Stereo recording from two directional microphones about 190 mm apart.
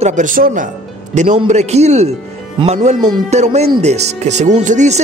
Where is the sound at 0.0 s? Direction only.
40° right (ahead or behind).